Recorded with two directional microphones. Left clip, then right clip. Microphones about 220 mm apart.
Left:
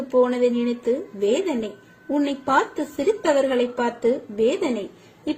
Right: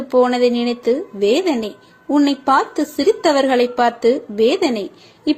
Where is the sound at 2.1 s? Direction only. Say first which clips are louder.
Right 6 dB; 10° right (ahead or behind).